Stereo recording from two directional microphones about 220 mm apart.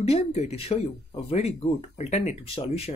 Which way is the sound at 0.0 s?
25° left (ahead or behind).